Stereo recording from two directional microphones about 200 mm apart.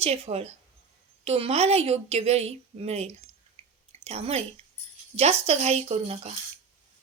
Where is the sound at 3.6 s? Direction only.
30° right (ahead or behind).